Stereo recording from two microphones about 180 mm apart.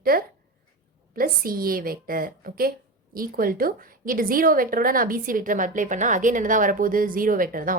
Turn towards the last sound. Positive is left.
turn(degrees=-50)  # may be behind; listen again after turning